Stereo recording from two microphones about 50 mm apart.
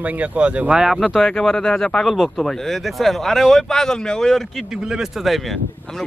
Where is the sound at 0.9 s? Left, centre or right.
Centre.